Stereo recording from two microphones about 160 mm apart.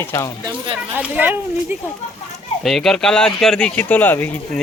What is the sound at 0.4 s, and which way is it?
Speech, 30° right (ahead or behind).